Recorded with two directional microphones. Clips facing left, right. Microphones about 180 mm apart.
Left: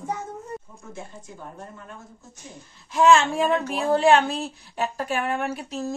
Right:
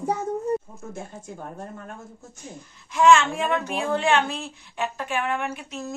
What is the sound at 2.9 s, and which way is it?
A child's voice, 35° left (ahead or behind).